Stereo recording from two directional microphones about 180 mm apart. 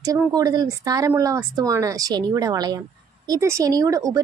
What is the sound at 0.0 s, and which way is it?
A woman's voice, 20° right (ahead or behind).